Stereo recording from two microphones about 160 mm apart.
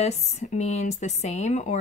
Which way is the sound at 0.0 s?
45° left (ahead or behind).